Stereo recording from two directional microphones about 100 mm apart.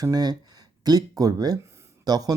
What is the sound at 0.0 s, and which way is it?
Speech, 40° right (ahead or behind).